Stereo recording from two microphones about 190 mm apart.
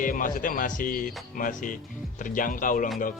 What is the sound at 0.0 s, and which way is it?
A man's voice, 45° left (ahead or behind).